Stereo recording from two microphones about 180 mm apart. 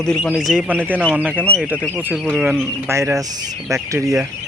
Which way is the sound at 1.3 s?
10° left (ahead or behind).